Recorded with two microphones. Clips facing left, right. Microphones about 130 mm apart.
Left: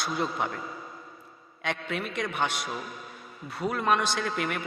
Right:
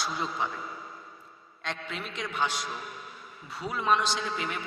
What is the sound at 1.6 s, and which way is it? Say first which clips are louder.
A man's voice: left 5 dB; 65° left (ahead or behind).